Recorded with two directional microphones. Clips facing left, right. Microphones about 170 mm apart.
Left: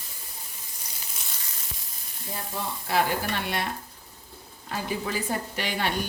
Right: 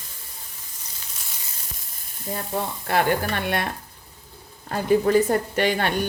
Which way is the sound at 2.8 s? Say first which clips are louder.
Right 3 dB; 55° right (ahead or behind).